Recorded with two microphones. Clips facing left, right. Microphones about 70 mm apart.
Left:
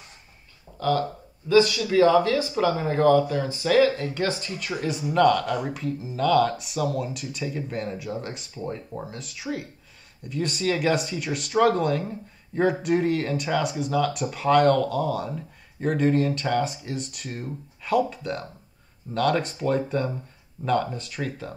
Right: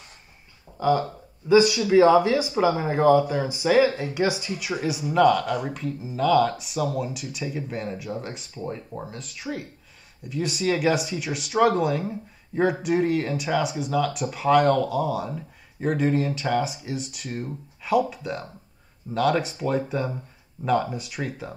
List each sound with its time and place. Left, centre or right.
0.7 s speech: centre